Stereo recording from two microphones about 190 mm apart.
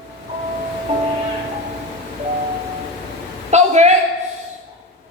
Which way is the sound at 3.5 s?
35° right (ahead or behind).